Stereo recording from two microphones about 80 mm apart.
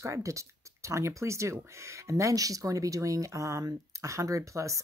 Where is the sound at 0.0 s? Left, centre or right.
Right.